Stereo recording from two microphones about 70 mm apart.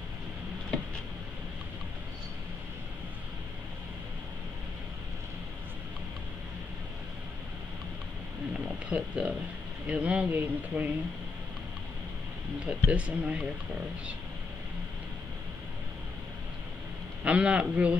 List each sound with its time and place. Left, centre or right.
8.9 s speech: centre
12.6 s speech: centre
17.2 s speech: centre